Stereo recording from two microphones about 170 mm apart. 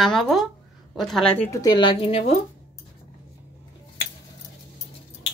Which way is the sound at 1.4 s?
25° left (ahead or behind).